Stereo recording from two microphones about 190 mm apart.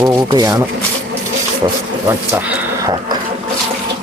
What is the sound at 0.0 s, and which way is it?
Speech, 20° right (ahead or behind).